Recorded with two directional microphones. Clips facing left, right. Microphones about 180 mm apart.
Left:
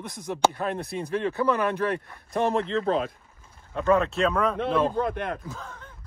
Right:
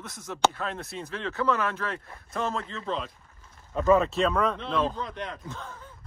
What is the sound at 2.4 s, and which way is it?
Speech, 65° left (ahead or behind).